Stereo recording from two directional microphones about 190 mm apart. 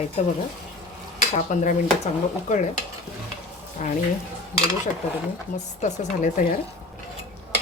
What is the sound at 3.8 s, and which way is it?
Speech, 40° left (ahead or behind).